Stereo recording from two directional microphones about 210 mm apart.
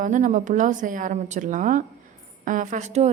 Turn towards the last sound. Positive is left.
turn(degrees=-35)  # may be behind; listen again after turning